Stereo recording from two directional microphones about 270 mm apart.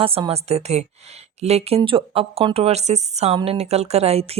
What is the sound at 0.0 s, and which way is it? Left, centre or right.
Speech, right.